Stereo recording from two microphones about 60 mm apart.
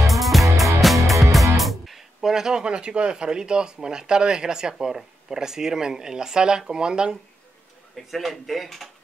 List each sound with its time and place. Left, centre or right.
0.1 s music: centre
0.7 s speech: centre
7.9 s speech: centre